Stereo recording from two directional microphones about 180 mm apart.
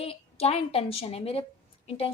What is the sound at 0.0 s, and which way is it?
A woman's voice, 35° left (ahead or behind).